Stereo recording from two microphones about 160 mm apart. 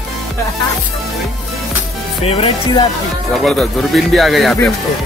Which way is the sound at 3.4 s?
5° left (ahead or behind).